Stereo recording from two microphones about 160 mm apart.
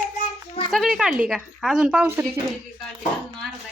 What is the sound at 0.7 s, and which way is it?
Speech, centre (ahead or behind).